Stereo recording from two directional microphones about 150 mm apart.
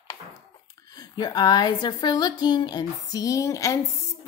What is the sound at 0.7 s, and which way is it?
A woman's voice, 25° left (ahead or behind).